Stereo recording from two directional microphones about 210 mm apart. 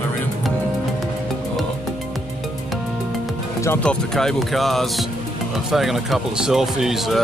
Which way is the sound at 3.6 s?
10° left (ahead or behind).